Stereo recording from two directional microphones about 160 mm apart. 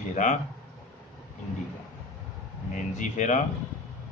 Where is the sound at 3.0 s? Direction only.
50° left (ahead or behind).